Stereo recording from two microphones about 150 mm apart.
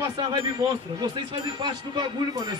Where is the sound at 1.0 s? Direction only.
30° right (ahead or behind).